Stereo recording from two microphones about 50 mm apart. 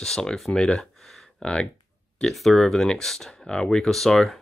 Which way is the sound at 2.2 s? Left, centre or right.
Centre.